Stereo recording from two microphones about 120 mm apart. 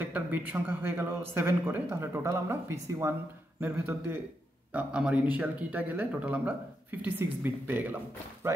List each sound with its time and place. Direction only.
0.0 s speech: 15° right (ahead or behind)